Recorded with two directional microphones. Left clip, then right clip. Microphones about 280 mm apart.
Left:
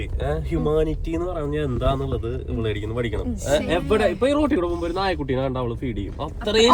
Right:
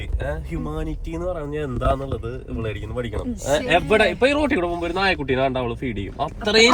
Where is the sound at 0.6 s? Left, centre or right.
Centre.